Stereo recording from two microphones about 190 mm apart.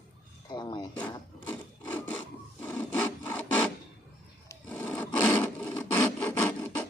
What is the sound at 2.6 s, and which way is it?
Filing, 5° left (ahead or behind).